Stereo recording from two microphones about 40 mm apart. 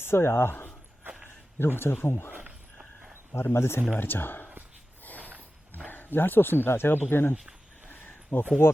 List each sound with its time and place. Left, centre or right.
0.0 s speech: left
3.3 s speech: left
3.9 s speech: left
5.0 s a sound: left
5.9 s speech: left
8.3 s speech: left